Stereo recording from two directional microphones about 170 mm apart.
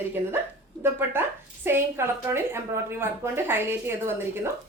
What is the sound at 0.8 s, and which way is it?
A woman's voice, 15° right (ahead or behind).